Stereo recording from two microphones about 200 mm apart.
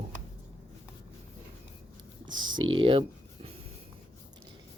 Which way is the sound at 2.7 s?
25° right (ahead or behind).